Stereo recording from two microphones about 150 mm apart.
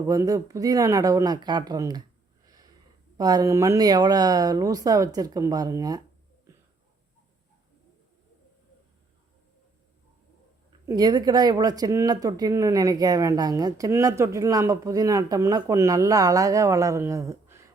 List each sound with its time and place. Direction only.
0.0 s speech: 20° right (ahead or behind)
3.2 s speech: 25° right (ahead or behind)
10.7 s speech: 25° right (ahead or behind)